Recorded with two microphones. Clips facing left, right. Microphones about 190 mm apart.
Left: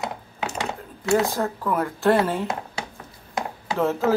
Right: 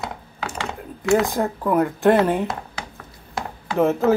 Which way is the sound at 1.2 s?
15° right (ahead or behind).